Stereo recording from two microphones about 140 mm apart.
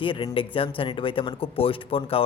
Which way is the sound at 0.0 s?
35° left (ahead or behind).